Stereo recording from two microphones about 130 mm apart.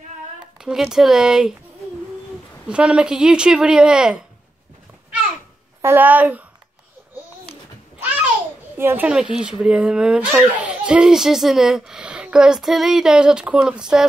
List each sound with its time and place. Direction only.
0.6 s a child's voice: 5° right (ahead or behind)
2.7 s speech: 10° right (ahead or behind)
5.8 s speech: 15° right (ahead or behind)
8.7 s a child's voice: 15° right (ahead or behind)
9.1 s a child's voice: 5° right (ahead or behind)